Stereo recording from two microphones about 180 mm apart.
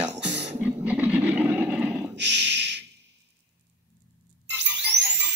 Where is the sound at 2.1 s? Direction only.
75° right (ahead or behind).